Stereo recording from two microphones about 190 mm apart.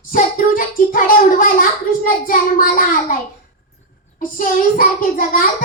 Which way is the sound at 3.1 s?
45° left (ahead or behind).